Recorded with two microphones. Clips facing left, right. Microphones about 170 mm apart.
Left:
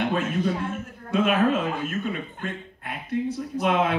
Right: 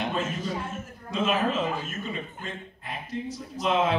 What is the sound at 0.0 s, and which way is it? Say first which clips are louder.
Speech: left 5 dB; 60° left (ahead or behind).